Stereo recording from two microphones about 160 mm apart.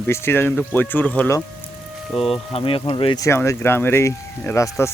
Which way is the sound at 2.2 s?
35° left (ahead or behind).